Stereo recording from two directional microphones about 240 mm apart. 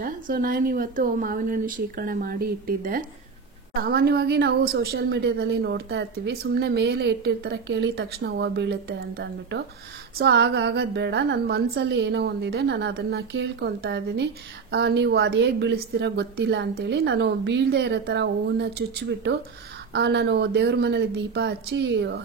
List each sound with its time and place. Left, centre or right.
0.0 s a woman's voice: right